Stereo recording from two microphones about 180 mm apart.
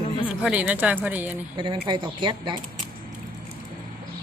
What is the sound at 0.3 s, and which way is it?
A woman's voice, 5° right (ahead or behind).